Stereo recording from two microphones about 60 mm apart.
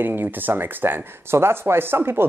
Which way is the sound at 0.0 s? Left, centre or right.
Right.